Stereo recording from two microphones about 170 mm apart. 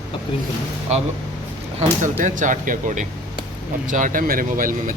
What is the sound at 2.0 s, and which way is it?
Speech, 50° right (ahead or behind).